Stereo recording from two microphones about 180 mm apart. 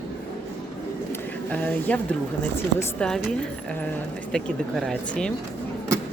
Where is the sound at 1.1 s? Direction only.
10° left (ahead or behind).